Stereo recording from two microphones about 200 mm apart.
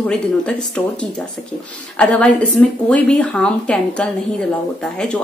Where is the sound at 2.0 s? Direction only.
5° left (ahead or behind).